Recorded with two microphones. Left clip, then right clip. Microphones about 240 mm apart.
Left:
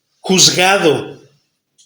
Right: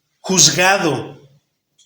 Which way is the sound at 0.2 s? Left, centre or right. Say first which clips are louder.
Left 2 dB; centre.